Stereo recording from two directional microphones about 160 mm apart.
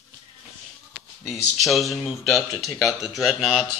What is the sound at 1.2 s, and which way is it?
Speech, centre (ahead or behind).